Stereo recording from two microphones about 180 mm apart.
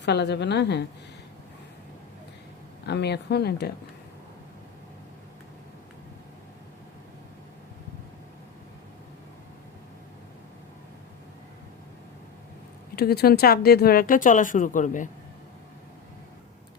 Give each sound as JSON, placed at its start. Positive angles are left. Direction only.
{"t": 0.0, "sound": "speech", "side_deg": 70}
{"t": 2.8, "sound": "speech", "side_deg": 70}
{"t": 13.0, "sound": "speech", "side_deg": 60}